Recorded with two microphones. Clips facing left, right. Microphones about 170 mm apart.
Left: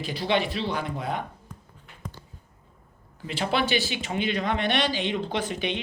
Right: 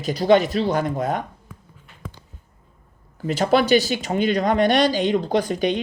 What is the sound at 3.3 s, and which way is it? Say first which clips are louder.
Speech: right 9 dB; 40° right (ahead or behind).